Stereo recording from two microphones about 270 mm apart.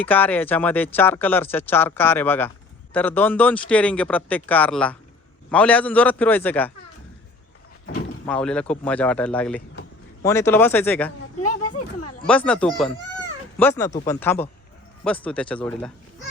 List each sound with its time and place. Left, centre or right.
0.0 s a man's voice: centre
8.3 s a man's voice: centre
11.3 s a sound: left
12.2 s a man's voice: centre